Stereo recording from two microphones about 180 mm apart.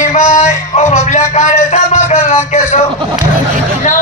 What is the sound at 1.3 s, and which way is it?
A man's voice, 40° left (ahead or behind).